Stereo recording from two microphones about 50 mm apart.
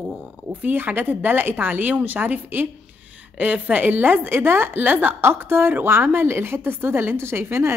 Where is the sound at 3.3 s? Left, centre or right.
Right.